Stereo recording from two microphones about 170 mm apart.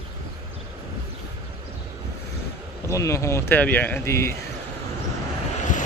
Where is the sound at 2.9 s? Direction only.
15° left (ahead or behind).